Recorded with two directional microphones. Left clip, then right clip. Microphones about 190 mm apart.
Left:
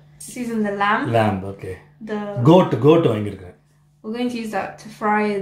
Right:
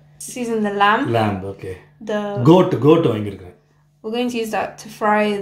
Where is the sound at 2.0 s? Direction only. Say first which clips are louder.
Right 6 dB; 40° right (ahead or behind).